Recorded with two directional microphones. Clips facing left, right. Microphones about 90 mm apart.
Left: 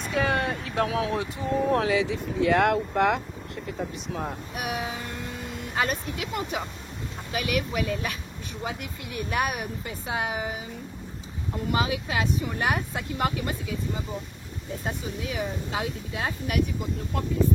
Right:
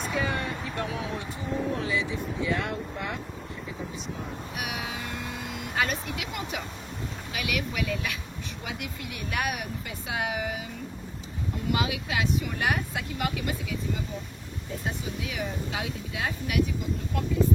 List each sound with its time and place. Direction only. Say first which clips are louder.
0.1 s a sound: left 6 dB; 80° left
0.7 s speech: left 6 dB; 85° left
1.4 s speech: left 4 dB; centre (ahead or behind)
1.7 s speech: left 6 dB; 90° left
4.6 s speech: left 4 dB; 40° left (ahead or behind)
11.7 s speech: left 2 dB; 35° left (ahead or behind)
14.9 s speech: left 2 dB; 35° left (ahead or behind)